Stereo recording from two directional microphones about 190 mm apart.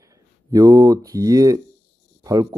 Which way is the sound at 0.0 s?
15° right (ahead or behind).